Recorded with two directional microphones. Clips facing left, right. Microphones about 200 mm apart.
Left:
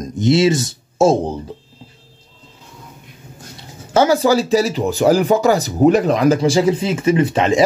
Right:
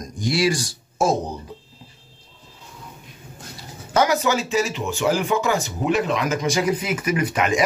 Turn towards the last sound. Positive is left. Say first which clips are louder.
# left 6 dB
turn(degrees=30)  # may be behind; listen again after turning